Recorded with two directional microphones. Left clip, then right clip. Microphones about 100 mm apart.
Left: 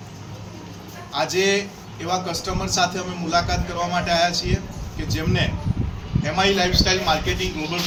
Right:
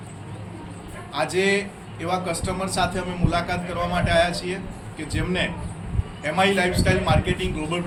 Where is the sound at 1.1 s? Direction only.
45° right (ahead or behind).